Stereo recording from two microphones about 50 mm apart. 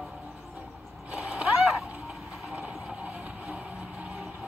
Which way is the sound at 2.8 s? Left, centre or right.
Right.